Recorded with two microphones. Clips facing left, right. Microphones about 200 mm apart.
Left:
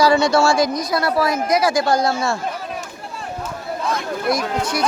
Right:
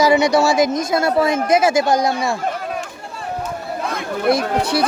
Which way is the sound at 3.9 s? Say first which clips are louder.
Right 1 dB; 60° right (ahead or behind).